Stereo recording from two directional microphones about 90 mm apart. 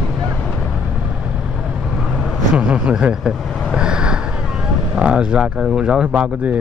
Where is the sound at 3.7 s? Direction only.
10° right (ahead or behind).